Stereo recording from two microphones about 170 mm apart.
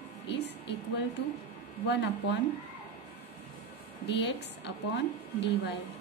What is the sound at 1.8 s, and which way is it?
Speech, 90° left.